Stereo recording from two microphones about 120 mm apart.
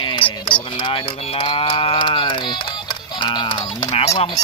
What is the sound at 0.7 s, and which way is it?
Sheep, 45° left (ahead or behind).